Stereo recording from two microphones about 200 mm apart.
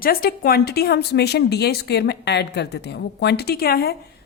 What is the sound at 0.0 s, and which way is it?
A woman's voice, 45° left (ahead or behind).